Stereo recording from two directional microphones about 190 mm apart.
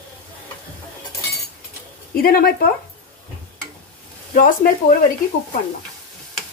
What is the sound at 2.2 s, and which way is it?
Speech, 50° left (ahead or behind).